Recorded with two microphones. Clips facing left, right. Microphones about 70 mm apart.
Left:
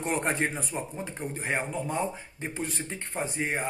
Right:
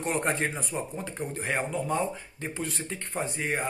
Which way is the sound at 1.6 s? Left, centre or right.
Centre.